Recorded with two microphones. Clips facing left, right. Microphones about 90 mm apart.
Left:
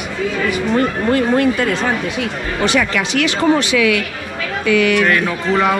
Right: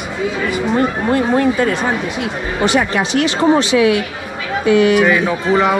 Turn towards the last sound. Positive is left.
turn(degrees=-5)  # may be behind; listen again after turning